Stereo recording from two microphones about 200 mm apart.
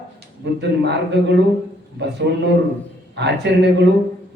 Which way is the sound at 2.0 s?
60° right (ahead or behind).